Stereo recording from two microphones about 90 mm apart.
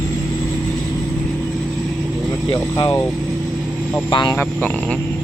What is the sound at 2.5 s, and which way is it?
Speech, 60° left (ahead or behind).